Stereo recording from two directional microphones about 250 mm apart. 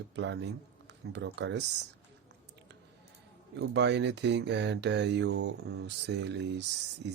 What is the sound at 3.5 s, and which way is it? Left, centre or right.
Mantra, right.